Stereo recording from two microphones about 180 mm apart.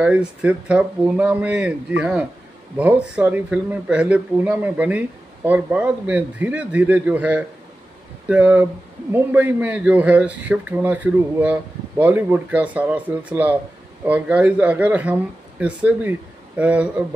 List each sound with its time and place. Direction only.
0.0 s speech: 5° right (ahead or behind)